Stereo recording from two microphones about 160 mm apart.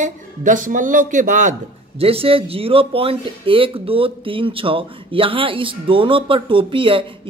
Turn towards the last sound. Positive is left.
turn(degrees=-35)  # may be behind; listen again after turning